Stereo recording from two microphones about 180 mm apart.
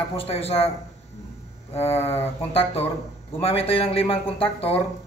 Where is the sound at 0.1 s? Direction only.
30° left (ahead or behind).